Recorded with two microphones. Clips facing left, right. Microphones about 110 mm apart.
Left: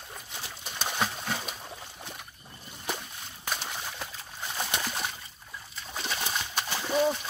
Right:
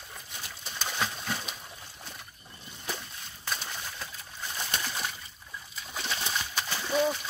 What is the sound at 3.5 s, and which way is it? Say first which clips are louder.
Bird: left 2 dB; 15° left (ahead or behind).